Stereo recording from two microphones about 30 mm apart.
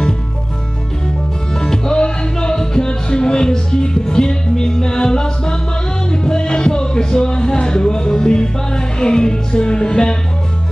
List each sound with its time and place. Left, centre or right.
1.5 s music: left